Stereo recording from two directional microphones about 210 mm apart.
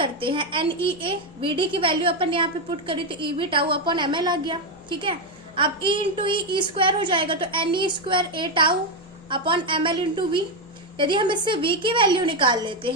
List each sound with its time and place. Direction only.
0.0 s a woman's voice: 25° right (ahead or behind)